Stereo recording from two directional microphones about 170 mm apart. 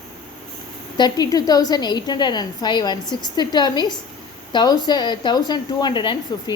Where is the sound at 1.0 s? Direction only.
25° left (ahead or behind).